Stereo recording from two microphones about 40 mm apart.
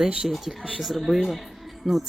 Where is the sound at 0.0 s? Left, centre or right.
Centre.